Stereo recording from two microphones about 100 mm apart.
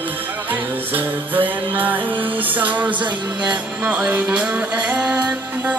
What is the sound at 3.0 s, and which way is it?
Music, 50° right (ahead or behind).